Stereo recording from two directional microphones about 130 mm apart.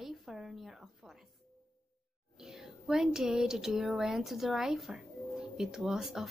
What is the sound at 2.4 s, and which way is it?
Speech, 5° right (ahead or behind).